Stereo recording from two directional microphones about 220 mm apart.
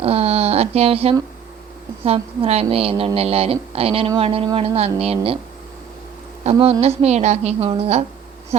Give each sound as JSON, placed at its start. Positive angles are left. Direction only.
{"t": 0.0, "sound": "a sound", "side_deg": -25}
{"t": 2.0, "sound": "a woman's voice", "side_deg": -25}
{"t": 6.4, "sound": "a woman's voice", "side_deg": -25}